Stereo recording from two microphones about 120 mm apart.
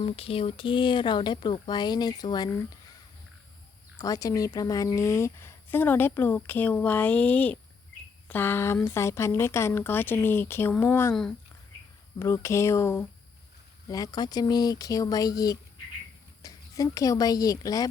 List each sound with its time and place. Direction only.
0.0 s speech: 50° left (ahead or behind); by 2.5 s 35° left (ahead or behind)
3.9 s a woman's voice: 30° left (ahead or behind)
11.1 s speech: 5° left (ahead or behind)
12.2 s speech: 20° left (ahead or behind)